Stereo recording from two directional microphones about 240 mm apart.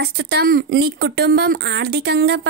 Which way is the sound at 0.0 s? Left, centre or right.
Right.